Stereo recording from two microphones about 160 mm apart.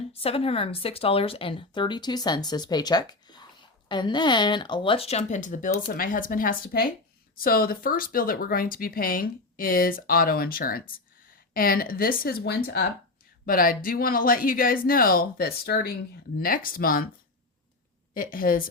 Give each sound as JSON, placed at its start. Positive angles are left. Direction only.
{"t": 0.1, "sound": "speech", "side_deg": 35}
{"t": 13.4, "sound": "speech", "side_deg": 65}
{"t": 16.4, "sound": "speech", "side_deg": 60}
{"t": 18.1, "sound": "speech", "side_deg": 60}